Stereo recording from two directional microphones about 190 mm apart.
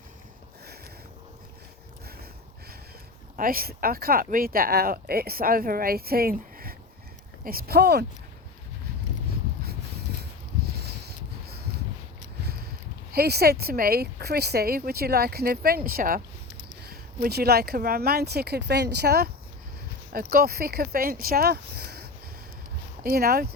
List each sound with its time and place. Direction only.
3.3 s speech: 50° right (ahead or behind)
10.8 s a sound: 60° right (ahead or behind)
13.1 s speech: 55° right (ahead or behind)